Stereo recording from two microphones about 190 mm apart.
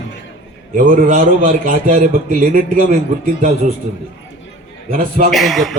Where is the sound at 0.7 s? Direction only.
45° right (ahead or behind).